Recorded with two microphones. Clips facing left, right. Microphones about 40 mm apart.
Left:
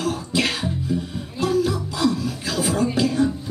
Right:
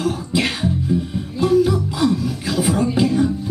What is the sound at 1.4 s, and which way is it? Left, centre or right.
Music, right.